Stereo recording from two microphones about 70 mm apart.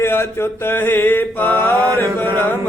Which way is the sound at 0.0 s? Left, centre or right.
Left.